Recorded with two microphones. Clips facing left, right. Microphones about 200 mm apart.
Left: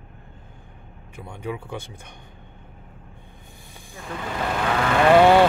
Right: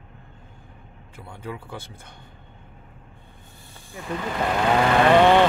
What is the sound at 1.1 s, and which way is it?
Speech, 15° left (ahead or behind).